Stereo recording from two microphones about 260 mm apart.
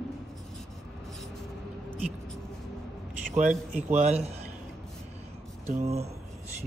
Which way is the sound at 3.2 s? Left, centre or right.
Right.